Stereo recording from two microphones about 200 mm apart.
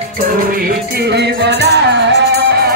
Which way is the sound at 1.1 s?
55° right (ahead or behind).